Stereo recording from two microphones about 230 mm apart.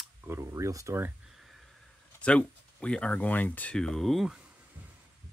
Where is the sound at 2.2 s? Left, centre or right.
Centre.